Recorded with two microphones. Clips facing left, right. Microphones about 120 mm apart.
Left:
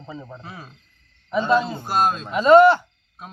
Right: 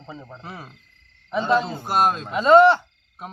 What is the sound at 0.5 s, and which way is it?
Speech, 5° right (ahead or behind).